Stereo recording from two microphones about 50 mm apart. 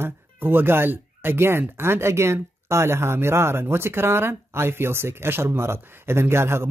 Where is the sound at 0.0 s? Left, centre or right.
Right.